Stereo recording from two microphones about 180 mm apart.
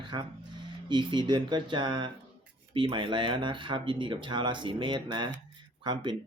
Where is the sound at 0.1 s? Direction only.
25° right (ahead or behind).